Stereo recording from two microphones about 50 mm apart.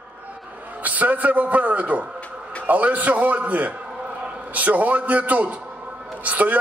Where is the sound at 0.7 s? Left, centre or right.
Right.